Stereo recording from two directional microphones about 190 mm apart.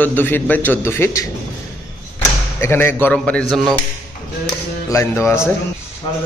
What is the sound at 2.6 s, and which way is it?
Speech, 10° left (ahead or behind).